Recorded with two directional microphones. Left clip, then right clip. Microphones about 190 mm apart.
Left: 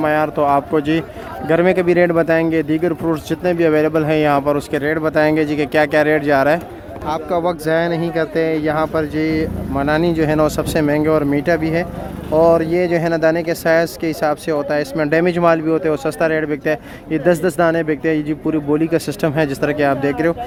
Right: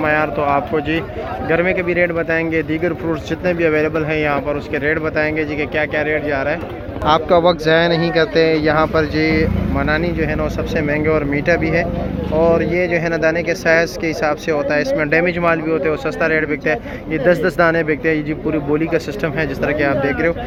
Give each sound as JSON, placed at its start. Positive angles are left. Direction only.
{"t": 0.0, "sound": "speech", "side_deg": 25}
{"t": 7.0, "sound": "speech", "side_deg": 5}